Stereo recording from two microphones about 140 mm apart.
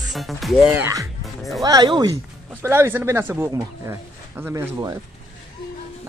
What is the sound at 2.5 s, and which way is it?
Speech, 15° right (ahead or behind).